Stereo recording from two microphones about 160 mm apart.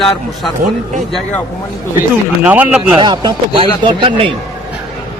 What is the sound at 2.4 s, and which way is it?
Speech, 10° right (ahead or behind).